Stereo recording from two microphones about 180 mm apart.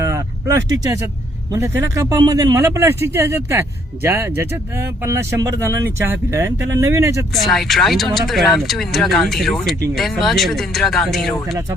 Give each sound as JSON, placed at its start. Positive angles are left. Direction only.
{"t": 0.0, "sound": "vehicle", "side_deg": -15}
{"t": 1.5, "sound": "speech", "side_deg": -15}
{"t": 7.3, "sound": "speech", "side_deg": 0}